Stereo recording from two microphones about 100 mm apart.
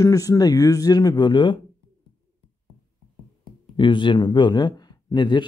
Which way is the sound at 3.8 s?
55° left (ahead or behind).